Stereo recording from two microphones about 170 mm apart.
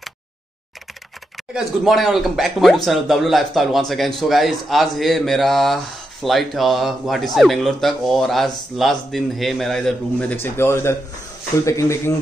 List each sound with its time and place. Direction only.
1.3 s speech: centre (ahead or behind)
10.2 s a man's voice: 15° left (ahead or behind)